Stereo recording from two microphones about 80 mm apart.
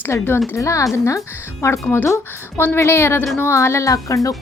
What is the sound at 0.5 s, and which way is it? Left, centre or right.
Speech, left.